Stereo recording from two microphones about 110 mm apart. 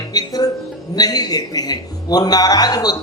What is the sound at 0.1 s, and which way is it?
Speech, 35° left (ahead or behind).